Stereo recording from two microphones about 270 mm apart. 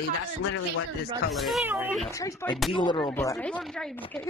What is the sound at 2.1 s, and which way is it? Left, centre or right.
Speech, centre.